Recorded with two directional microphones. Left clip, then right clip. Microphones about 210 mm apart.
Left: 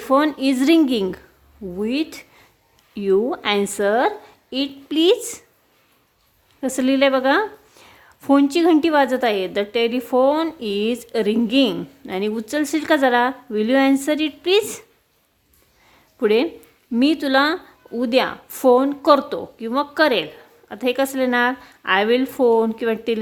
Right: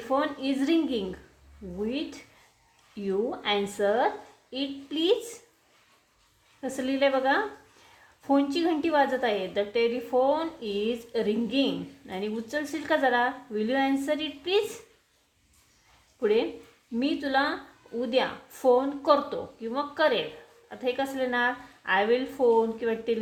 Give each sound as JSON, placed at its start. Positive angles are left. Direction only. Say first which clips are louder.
{"t": 0.0, "sound": "a woman's voice", "louder": "left 10 dB", "side_deg": 50}
{"t": 6.6, "sound": "a woman's voice", "louder": "left 8 dB", "side_deg": 50}
{"t": 16.2, "sound": "a woman's voice", "louder": "left 7 dB", "side_deg": 50}